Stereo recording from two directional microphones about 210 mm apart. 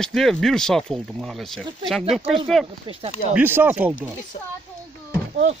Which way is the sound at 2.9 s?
25° right (ahead or behind).